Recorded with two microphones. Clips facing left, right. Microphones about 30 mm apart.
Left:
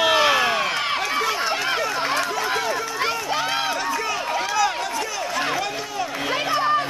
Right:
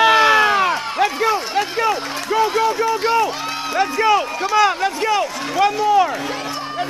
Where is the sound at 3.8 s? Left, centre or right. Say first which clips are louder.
Right 8 dB; right.